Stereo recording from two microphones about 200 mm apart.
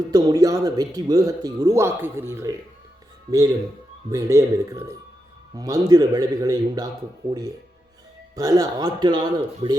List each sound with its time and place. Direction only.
0.1 s speech: 20° right (ahead or behind)
4.1 s a man's voice: 15° right (ahead or behind)
8.4 s a man's voice: 20° right (ahead or behind)